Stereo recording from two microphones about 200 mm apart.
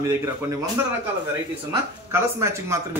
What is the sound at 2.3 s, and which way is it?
Speech, 15° right (ahead or behind).